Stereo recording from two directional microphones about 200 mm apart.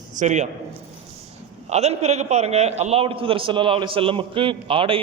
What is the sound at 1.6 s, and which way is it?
A man's voice, 35° right (ahead or behind).